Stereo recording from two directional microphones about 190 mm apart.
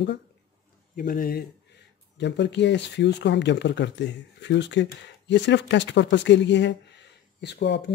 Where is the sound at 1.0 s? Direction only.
45° left (ahead or behind).